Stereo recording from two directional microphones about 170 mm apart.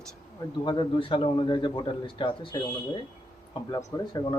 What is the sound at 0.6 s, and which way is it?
A man's voice, 25° left (ahead or behind).